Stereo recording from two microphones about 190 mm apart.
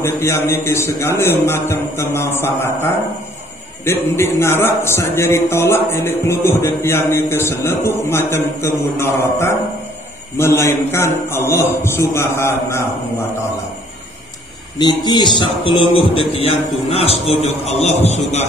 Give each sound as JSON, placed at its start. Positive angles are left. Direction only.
{"t": 0.0, "sound": "music", "side_deg": 15}
{"t": 14.8, "sound": "a man's voice", "side_deg": 20}